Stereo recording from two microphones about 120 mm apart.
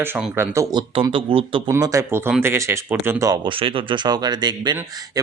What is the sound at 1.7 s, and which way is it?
Speech, 25° right (ahead or behind).